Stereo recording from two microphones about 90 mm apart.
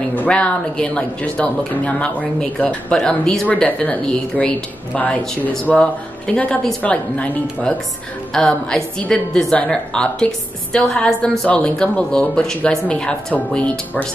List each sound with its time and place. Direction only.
0.1 s a woman's voice: 15° left (ahead or behind)